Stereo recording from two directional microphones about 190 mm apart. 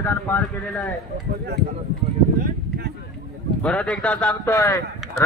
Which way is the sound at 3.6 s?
5° left (ahead or behind).